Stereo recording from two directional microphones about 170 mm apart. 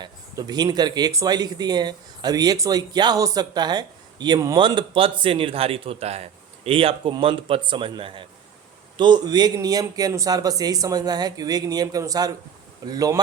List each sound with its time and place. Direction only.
0.0 s speech: 25° right (ahead or behind)